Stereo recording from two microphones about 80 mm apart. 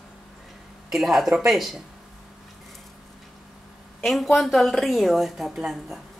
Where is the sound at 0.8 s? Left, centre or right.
Centre.